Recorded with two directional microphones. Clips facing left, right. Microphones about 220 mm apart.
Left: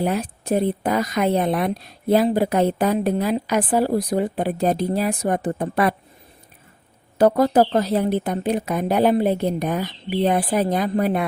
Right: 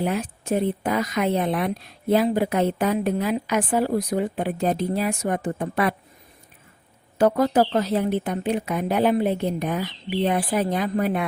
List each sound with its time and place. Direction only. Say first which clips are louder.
0.0 s speech: left 2 dB; 40° left (ahead or behind)
7.2 s speech: left 3 dB; 35° left (ahead or behind)